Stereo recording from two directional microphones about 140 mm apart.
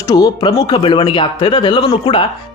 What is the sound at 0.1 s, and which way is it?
Speech, 30° left (ahead or behind).